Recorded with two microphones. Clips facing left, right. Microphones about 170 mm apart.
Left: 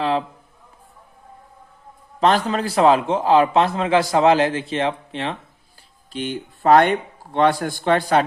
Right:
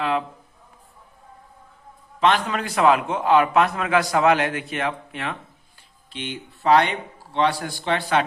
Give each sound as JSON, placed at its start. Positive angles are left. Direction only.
{"t": 0.0, "sound": "a man's voice", "side_deg": 30}
{"t": 2.2, "sound": "a man's voice", "side_deg": 35}
{"t": 6.1, "sound": "speech", "side_deg": 45}